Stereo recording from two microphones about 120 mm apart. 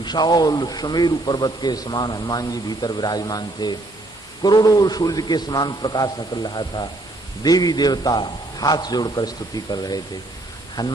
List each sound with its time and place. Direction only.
0.0 s a man's voice: 35° left (ahead or behind)